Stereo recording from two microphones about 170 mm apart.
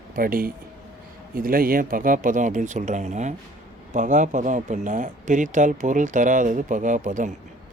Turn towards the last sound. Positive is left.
turn(degrees=-50)  # may be behind; listen again after turning